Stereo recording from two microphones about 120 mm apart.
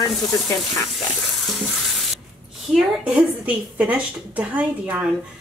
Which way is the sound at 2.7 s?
10° right (ahead or behind).